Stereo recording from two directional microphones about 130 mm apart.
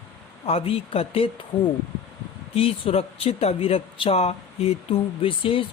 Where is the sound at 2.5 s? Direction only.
45° left (ahead or behind).